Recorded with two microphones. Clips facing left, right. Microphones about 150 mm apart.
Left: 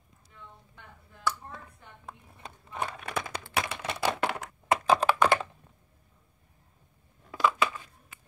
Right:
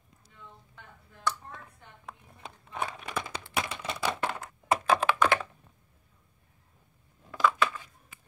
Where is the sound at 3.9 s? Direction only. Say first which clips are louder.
Left 3 dB; 75° left (ahead or behind).